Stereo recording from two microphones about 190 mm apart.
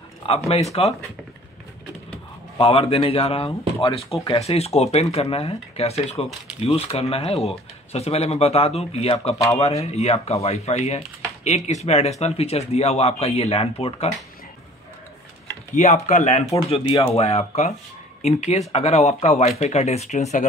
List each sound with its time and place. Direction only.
0.2 s speech: 30° left (ahead or behind)
2.5 s speech: 30° left (ahead or behind)
15.7 s speech: 35° left (ahead or behind)